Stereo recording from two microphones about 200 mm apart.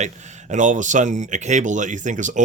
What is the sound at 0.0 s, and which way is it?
Speech, 35° right (ahead or behind).